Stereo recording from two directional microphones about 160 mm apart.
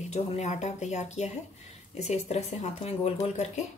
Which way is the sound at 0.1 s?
45° left (ahead or behind).